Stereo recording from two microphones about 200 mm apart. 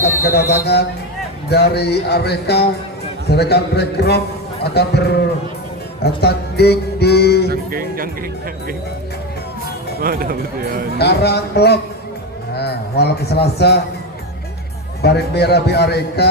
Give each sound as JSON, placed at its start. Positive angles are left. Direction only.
{"t": 0.2, "sound": "music", "side_deg": 50}
{"t": 1.5, "sound": "a man's voice", "side_deg": 55}
{"t": 7.4, "sound": "speech", "side_deg": -50}
{"t": 10.0, "sound": "speech", "side_deg": -45}
{"t": 10.9, "sound": "a man's voice", "side_deg": 55}
{"t": 15.0, "sound": "a man's voice", "side_deg": 55}